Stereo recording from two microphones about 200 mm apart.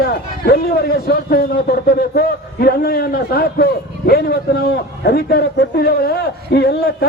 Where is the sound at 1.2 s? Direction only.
50° left (ahead or behind).